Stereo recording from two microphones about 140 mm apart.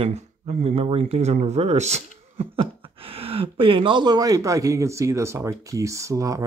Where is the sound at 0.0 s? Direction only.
50° right (ahead or behind).